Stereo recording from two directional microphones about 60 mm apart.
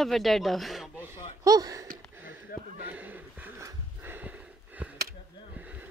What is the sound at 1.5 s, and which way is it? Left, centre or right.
Speech, right.